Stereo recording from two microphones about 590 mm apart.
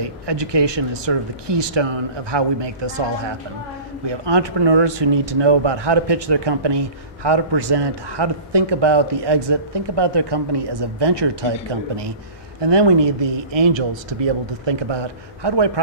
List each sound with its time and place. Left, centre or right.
0.0 s speech: right